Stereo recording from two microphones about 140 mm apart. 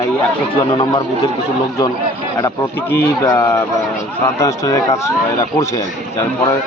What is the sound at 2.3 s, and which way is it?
A man's voice, 20° left (ahead or behind).